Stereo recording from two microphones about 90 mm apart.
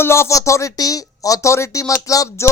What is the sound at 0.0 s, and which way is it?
Speech, 30° left (ahead or behind).